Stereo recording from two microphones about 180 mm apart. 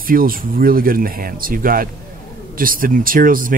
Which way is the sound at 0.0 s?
50° right (ahead or behind).